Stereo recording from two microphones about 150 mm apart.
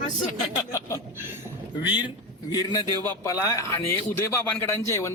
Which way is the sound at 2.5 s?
25° left (ahead or behind).